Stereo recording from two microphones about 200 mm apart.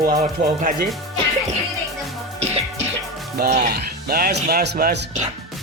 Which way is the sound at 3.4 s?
50° right (ahead or behind).